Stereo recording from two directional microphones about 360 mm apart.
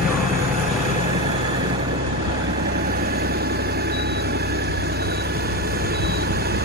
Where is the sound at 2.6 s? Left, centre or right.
Right.